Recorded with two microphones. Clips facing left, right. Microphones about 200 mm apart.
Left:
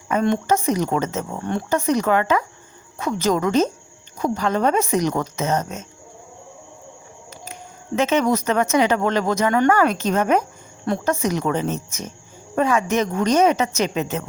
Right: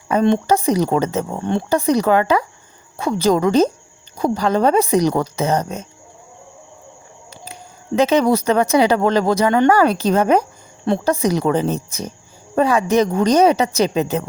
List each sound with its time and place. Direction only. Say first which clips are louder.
0.1 s speech: right 4 dB; 35° right (ahead or behind)
7.9 s speech: right 4 dB; 35° right (ahead or behind)